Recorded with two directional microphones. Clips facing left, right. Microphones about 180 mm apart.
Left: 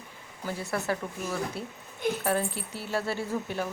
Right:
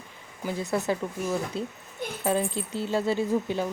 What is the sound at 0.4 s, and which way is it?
Speech, 20° right (ahead or behind).